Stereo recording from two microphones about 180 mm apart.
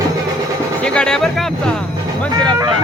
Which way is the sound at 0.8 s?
5° left (ahead or behind).